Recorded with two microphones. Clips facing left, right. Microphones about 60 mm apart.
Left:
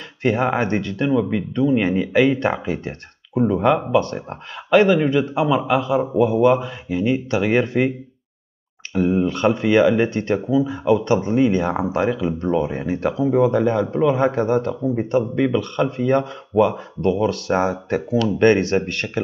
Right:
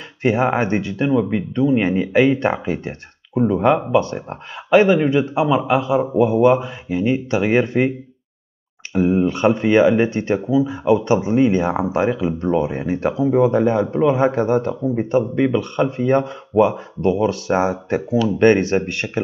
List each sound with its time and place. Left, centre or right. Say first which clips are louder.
0.2 s speech: right 2 dB; centre
8.9 s speech: right 2 dB; centre